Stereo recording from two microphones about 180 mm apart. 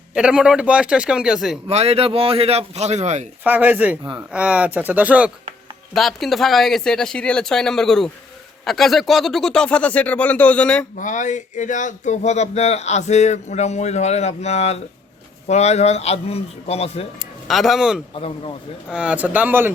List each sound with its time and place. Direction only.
0.1 s speech: 5° right (ahead or behind)
1.6 s a man's voice: 35° right (ahead or behind)
3.4 s speech: 10° right (ahead or behind); by 10.8 s 5° left (ahead or behind)
10.9 s speech: 45° left (ahead or behind)
17.2 s speech: centre (ahead or behind)
18.1 s speech: 30° left (ahead or behind)
18.9 s speech: 5° right (ahead or behind)